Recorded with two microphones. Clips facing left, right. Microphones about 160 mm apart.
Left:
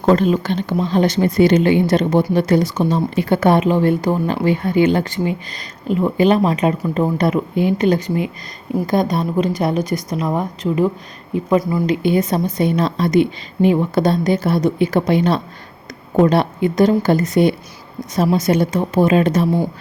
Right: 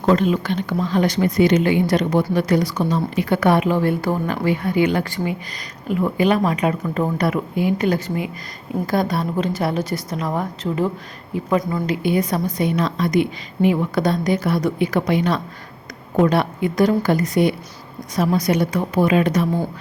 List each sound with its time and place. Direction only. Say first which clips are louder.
0.0 s a woman's voice: left 3 dB; 30° left (ahead or behind)